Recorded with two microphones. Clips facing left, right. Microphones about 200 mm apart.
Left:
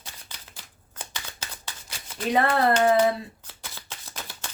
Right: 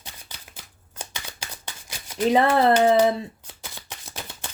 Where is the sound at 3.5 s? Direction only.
15° right (ahead or behind).